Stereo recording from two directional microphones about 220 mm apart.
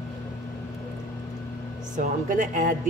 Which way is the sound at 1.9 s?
35° right (ahead or behind).